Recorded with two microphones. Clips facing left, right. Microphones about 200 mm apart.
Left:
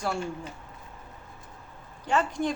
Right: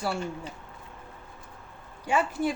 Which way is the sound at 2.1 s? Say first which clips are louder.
Even; 10° right (ahead or behind).